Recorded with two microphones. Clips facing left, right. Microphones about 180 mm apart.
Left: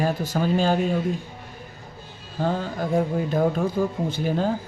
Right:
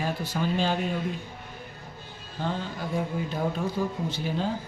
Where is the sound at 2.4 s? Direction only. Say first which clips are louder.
Left 6 dB; 45° left (ahead or behind).